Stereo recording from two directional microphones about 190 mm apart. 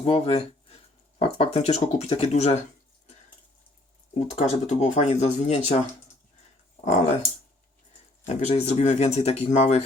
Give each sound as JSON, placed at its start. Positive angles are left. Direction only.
{"t": 0.0, "sound": "speech", "side_deg": 30}
{"t": 4.2, "sound": "speech", "side_deg": 40}
{"t": 6.8, "sound": "speech", "side_deg": 40}
{"t": 8.4, "sound": "speech", "side_deg": 35}